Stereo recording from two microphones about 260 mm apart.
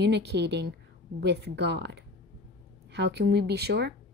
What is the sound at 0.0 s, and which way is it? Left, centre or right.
Speech, right.